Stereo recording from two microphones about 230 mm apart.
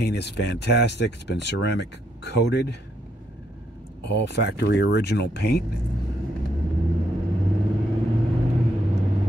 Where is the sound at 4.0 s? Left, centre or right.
Left.